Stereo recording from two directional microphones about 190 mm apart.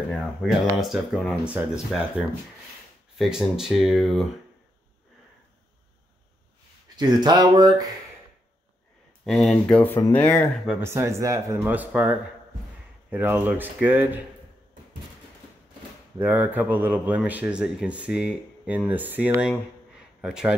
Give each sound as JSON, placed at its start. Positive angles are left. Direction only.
{"t": 0.4, "sound": "speech", "side_deg": 0}
{"t": 7.0, "sound": "speech", "side_deg": -20}
{"t": 9.2, "sound": "speech", "side_deg": 0}
{"t": 10.8, "sound": "speech", "side_deg": -15}
{"t": 16.2, "sound": "speech", "side_deg": -10}